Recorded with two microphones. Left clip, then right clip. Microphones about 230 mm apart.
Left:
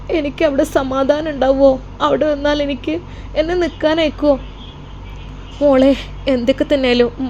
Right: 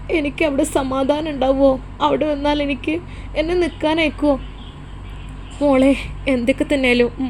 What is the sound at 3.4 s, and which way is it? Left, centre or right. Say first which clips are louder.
Speech: left 1 dB; left.